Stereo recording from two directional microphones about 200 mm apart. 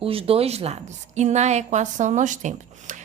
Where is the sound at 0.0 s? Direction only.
30° right (ahead or behind).